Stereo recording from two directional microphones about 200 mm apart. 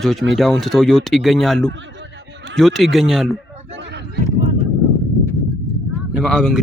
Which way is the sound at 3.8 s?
60° right (ahead or behind).